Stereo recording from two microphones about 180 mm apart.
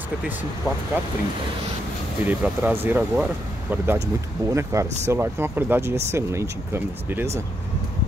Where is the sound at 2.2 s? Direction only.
10° right (ahead or behind).